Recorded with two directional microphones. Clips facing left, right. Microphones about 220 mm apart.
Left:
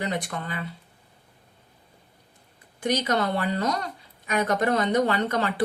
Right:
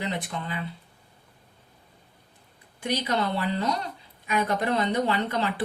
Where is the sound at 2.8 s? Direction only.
45° left (ahead or behind).